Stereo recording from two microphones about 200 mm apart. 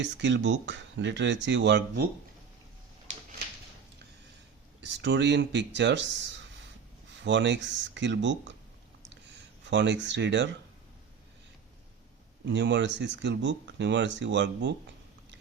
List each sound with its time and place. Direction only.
0.0 s speech: 65° right (ahead or behind)
4.8 s speech: 65° right (ahead or behind)
9.6 s speech: 65° right (ahead or behind)
12.5 s speech: 60° right (ahead or behind)